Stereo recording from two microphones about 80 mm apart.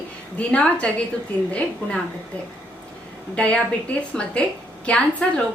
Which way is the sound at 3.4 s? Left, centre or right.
Centre.